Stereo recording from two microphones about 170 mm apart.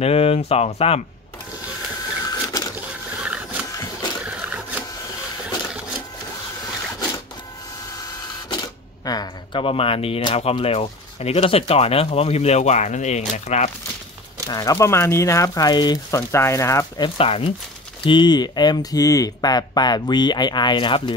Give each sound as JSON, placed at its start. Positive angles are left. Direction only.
{"t": 0.0, "sound": "speech", "side_deg": 35}
{"t": 2.2, "sound": "printer", "side_deg": 20}
{"t": 3.2, "sound": "printer", "side_deg": -5}
{"t": 3.7, "sound": "a sound", "side_deg": 20}
{"t": 4.2, "sound": "a sound", "side_deg": -5}
{"t": 8.5, "sound": "speech", "side_deg": 20}
{"t": 14.5, "sound": "speech", "side_deg": 20}